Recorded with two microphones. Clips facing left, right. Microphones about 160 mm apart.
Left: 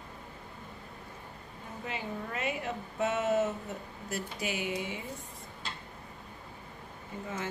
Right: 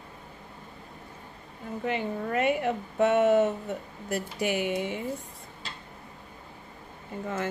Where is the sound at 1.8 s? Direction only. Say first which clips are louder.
Right 8 dB; 60° right (ahead or behind).